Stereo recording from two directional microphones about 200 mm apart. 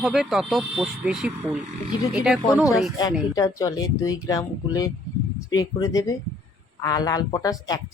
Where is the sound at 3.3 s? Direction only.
15° left (ahead or behind).